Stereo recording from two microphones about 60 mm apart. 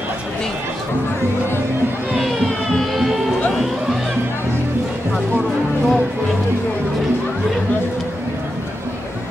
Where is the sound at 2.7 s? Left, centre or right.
Centre.